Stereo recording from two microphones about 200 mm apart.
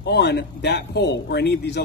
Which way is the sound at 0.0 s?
55° left (ahead or behind).